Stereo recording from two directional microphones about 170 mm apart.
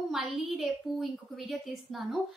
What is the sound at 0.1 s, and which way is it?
A woman's voice, centre (ahead or behind).